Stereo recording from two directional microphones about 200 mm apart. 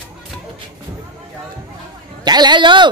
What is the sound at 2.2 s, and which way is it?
Speech, 20° right (ahead or behind).